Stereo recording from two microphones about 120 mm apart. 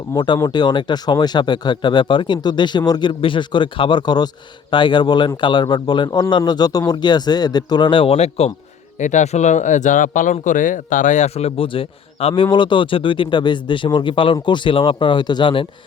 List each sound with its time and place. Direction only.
0.1 s speech: 35° left (ahead or behind); by 8.5 s 60° left (ahead or behind)
9.0 s speech: 90° left; by 15.6 s 40° left (ahead or behind)